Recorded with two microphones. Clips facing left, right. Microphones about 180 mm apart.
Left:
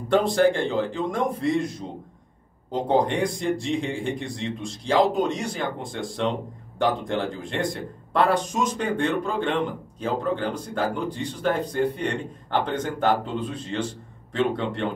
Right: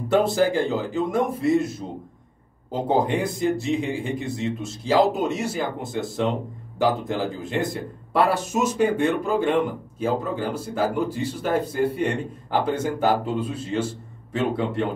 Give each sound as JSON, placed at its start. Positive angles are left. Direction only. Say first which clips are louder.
{"t": 0.1, "sound": "speech", "louder": "even", "side_deg": -5}